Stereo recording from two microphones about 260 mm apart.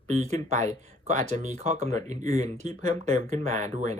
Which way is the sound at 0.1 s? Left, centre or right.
Right.